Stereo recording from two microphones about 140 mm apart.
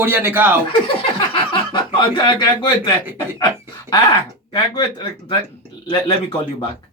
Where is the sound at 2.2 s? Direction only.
35° left (ahead or behind).